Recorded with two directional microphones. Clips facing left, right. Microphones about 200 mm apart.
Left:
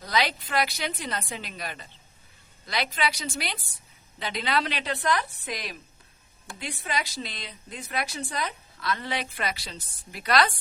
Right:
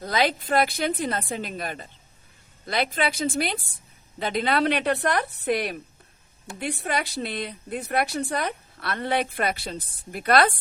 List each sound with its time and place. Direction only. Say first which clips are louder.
0.0 s a woman's voice: right 4 dB; 50° right (ahead or behind)